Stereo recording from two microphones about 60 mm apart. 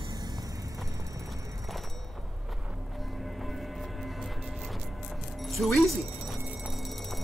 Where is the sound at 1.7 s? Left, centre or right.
Centre.